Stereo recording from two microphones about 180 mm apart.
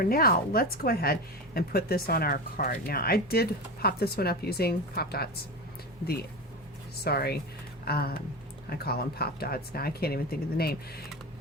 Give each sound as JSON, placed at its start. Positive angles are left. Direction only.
{"t": 0.0, "sound": "a woman's voice", "side_deg": 55}
{"t": 7.0, "sound": "a woman's voice", "side_deg": 60}